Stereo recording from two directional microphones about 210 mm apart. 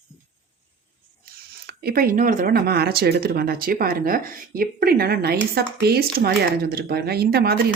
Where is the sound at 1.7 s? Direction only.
45° right (ahead or behind).